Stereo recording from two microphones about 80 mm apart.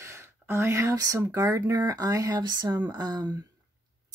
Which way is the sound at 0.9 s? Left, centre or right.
Right.